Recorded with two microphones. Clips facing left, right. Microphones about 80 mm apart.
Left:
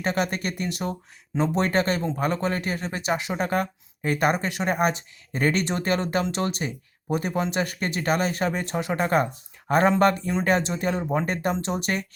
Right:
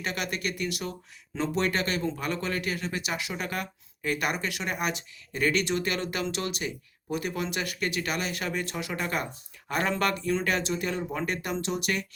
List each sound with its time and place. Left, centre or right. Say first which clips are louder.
0.0 s speech: left 6 dB; left